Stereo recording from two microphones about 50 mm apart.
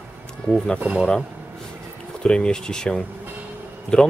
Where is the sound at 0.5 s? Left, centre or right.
Centre.